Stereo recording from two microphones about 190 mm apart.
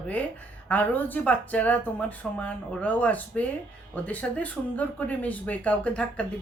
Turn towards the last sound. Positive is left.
turn(degrees=5)  # may be behind; listen again after turning